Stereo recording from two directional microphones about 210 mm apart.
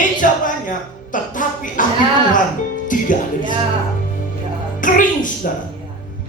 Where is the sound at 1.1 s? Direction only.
40° left (ahead or behind).